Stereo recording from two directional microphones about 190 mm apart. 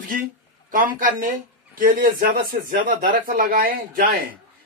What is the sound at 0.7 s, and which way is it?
A man's voice, 45° right (ahead or behind).